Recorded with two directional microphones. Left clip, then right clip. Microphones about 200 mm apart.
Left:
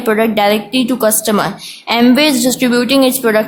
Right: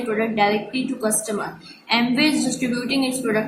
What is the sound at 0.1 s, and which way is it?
A woman's voice, 45° left (ahead or behind).